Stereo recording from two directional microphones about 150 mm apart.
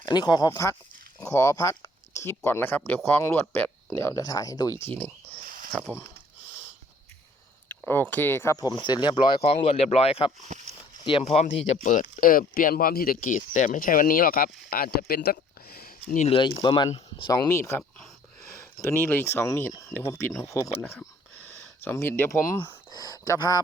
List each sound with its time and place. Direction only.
0.0 s speech: 30° left (ahead or behind)
5.7 s speech: 10° left (ahead or behind)
7.9 s speech: 15° left (ahead or behind)
8.6 s speech: 30° left (ahead or behind); by 16.1 s 85° left
16.1 s speech: 45° left (ahead or behind)
16.4 s speech: 30° left (ahead or behind)